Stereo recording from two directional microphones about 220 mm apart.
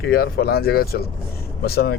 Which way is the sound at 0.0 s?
45° left (ahead or behind).